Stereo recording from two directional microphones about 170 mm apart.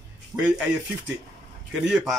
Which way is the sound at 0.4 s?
5° right (ahead or behind).